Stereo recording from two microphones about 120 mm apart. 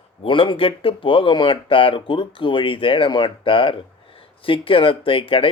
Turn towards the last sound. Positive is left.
turn(degrees=50)  # may be behind; listen again after turning